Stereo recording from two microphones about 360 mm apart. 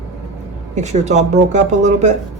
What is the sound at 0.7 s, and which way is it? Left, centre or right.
Speech, centre.